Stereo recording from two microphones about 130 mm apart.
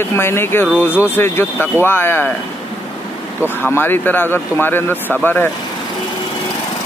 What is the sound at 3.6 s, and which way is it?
Speech, 15° left (ahead or behind).